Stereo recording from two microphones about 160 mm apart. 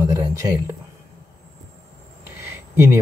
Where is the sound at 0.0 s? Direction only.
20° right (ahead or behind).